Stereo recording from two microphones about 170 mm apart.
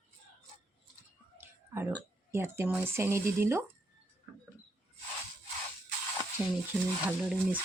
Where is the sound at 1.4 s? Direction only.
15° right (ahead or behind).